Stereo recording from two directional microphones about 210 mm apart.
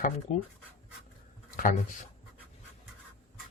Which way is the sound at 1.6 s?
40° left (ahead or behind).